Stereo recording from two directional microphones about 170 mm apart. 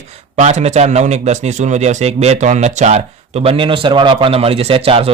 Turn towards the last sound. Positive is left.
turn(degrees=-35)  # may be behind; listen again after turning